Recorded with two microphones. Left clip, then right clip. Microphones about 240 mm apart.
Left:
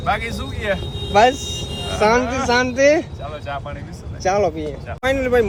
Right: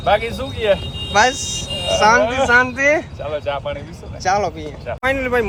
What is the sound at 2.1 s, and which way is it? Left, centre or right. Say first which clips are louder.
Speech: right 4 dB; centre.